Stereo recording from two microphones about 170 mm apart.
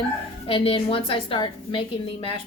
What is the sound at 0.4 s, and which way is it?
Speech, 35° left (ahead or behind).